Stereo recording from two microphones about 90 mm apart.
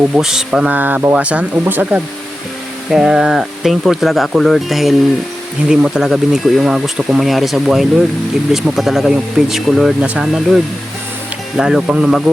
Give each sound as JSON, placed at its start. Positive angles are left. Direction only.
{"t": 0.2, "sound": "speech", "side_deg": -5}
{"t": 0.7, "sound": "speech", "side_deg": -20}